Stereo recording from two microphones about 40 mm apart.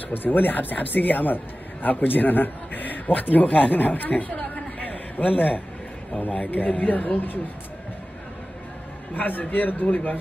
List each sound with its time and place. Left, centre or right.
0.1 s speech: left
9.1 s speech: left